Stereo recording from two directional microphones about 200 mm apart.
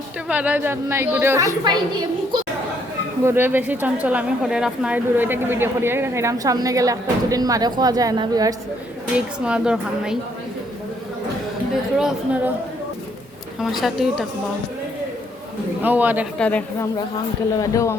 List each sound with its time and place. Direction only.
0.3 s a woman's voice: 10° right (ahead or behind)
3.2 s a woman's voice: 10° right (ahead or behind)
9.1 s a woman's voice: 5° right (ahead or behind)
11.9 s a woman's voice: 5° right (ahead or behind)
13.6 s a woman's voice: centre (ahead or behind)
15.8 s a woman's voice: 10° right (ahead or behind)
16.4 s speech: 5° left (ahead or behind)